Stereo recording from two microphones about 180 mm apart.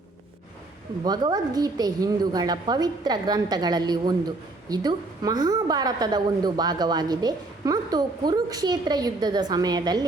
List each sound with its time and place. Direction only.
1.0 s a woman's voice: 25° right (ahead or behind)